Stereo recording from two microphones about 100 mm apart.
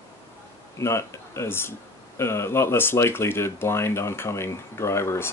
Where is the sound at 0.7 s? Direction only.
30° left (ahead or behind).